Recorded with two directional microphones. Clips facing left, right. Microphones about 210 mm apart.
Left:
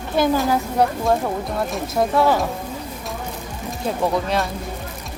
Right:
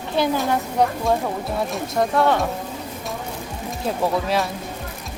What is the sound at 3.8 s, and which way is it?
Speech, centre (ahead or behind).